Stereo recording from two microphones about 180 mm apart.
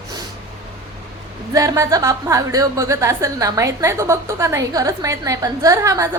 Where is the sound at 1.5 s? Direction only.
20° right (ahead or behind).